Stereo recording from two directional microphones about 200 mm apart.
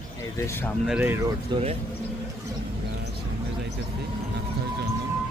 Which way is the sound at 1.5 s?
20° right (ahead or behind).